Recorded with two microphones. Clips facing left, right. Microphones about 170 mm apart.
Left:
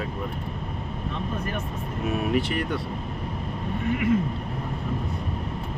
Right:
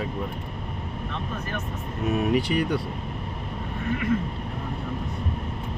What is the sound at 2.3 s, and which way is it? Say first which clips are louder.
Speech: right 2 dB; centre (ahead or behind).